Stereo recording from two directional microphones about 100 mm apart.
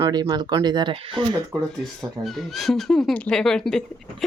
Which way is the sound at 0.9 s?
60° right (ahead or behind).